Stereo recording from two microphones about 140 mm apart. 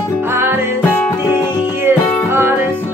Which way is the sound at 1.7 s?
15° right (ahead or behind).